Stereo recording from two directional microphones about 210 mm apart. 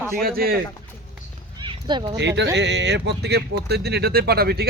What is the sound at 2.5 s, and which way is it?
Speech, 55° right (ahead or behind).